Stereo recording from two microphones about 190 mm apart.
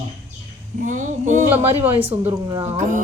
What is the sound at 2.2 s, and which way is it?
Speech, 30° right (ahead or behind).